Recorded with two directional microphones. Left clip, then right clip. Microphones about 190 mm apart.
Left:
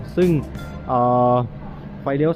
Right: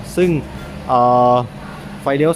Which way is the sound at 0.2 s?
15° right (ahead or behind).